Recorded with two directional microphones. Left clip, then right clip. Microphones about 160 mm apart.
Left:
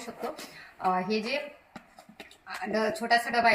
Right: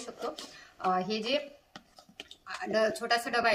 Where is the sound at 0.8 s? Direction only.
20° right (ahead or behind).